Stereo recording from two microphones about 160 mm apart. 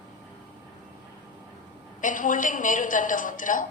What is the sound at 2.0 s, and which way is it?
A woman's voice, 55° left (ahead or behind).